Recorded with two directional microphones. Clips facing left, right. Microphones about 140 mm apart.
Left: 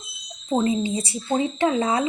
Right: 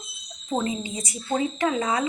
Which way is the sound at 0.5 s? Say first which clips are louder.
Left 5 dB; 30° left (ahead or behind).